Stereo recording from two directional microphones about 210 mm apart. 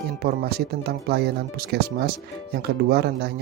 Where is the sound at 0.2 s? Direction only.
50° right (ahead or behind).